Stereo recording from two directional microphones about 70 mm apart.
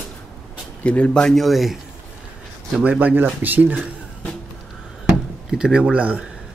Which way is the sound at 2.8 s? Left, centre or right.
Right.